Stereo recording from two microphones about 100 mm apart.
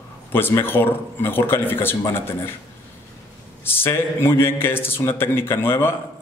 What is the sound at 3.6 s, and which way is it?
A man's voice, 20° left (ahead or behind).